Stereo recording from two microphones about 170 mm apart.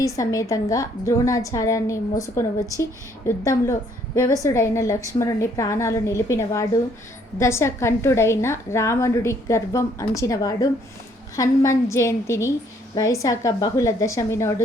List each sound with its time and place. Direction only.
0.0 s a woman's voice: 20° left (ahead or behind)